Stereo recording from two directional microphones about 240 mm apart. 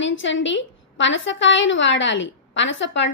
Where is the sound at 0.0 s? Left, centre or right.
Left.